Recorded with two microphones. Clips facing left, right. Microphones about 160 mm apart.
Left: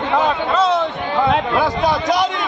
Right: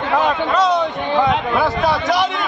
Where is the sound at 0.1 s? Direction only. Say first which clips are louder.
Right 1 dB; 5° left (ahead or behind).